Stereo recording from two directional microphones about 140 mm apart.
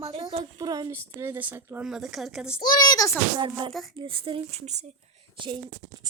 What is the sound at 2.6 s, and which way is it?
Speech, 30° left (ahead or behind).